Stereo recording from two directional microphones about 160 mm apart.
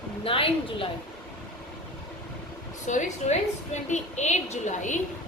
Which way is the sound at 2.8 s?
50° left (ahead or behind).